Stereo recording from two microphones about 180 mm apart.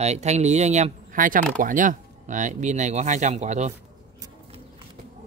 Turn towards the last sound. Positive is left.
turn(degrees=-40)  # may be behind; listen again after turning